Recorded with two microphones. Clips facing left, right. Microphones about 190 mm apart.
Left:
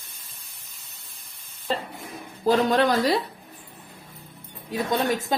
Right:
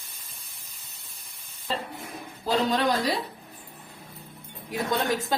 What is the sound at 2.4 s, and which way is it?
Speech, 55° left (ahead or behind).